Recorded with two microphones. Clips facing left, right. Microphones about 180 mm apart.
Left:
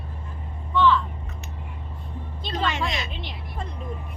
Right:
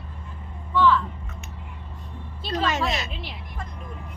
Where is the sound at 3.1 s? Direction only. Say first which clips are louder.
Even; 5° right (ahead or behind).